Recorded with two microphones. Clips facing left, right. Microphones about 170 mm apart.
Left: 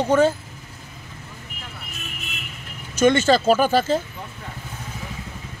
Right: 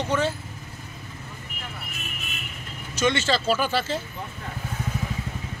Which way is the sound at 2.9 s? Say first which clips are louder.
Left 7 dB; 50° left (ahead or behind).